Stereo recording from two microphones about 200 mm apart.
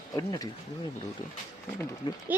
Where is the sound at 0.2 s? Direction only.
15° left (ahead or behind).